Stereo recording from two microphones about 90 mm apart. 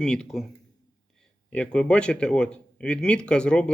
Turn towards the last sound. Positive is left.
turn(degrees=10)  # may be behind; listen again after turning